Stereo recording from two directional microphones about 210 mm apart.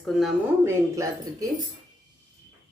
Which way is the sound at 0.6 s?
15° right (ahead or behind).